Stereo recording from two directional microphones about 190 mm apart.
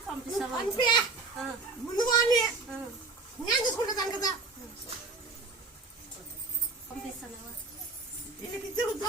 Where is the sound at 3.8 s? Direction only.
20° left (ahead or behind).